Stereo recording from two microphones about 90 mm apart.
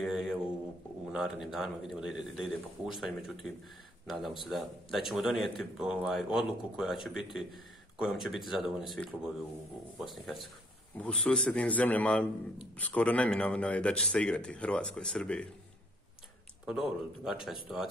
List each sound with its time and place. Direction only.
0.0 s a sound: 5° right (ahead or behind)
1.0 s speech: 5° right (ahead or behind)
11.0 s a man's voice: 10° left (ahead or behind)
16.6 s speech: 5° right (ahead or behind)